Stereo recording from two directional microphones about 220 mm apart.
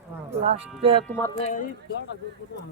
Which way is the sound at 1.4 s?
30° left (ahead or behind).